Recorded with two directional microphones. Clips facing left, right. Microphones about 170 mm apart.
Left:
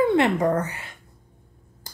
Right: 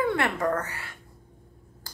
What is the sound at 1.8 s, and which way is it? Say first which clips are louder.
Finger snapping: left 1 dB; 20° left (ahead or behind).